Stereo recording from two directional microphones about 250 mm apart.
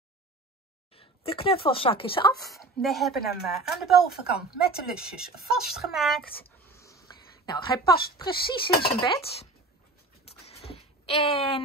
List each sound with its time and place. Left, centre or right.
0.9 s speech: left
2.5 s speech: centre
4.3 s speech: left
5.5 s speech: centre
6.7 s speech: centre
10.2 s a sound: left